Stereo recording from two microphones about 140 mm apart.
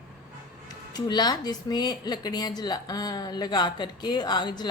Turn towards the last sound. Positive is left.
turn(degrees=30)  # may be behind; listen again after turning